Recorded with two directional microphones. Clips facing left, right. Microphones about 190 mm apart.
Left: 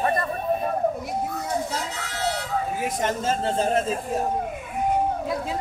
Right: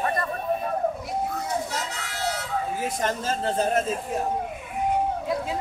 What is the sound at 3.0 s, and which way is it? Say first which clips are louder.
Speech: left 3 dB; 25° left (ahead or behind).